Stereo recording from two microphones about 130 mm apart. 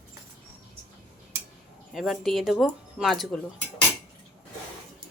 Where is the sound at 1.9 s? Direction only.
Centre (ahead or behind).